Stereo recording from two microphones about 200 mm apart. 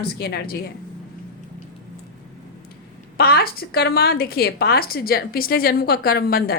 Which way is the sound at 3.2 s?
50° left (ahead or behind).